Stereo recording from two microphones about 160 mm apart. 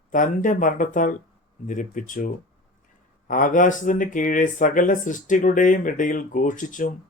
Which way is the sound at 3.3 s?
55° left (ahead or behind).